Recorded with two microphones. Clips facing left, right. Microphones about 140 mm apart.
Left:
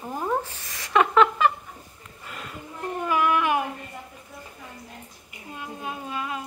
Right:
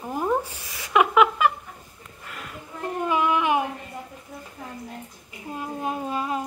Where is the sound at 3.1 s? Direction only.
20° right (ahead or behind).